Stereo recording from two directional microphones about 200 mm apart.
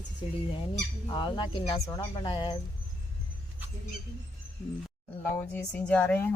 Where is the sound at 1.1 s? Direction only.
25° left (ahead or behind).